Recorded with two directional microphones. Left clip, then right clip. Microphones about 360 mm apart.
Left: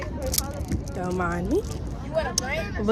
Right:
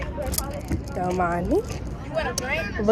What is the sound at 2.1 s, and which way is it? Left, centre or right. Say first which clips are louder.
Speech: right 1 dB; left.